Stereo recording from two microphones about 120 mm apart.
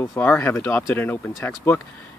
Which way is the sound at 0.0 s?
20° left (ahead or behind).